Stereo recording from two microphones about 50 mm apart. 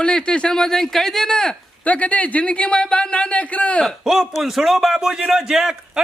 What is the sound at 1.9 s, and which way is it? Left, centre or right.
Speech, left.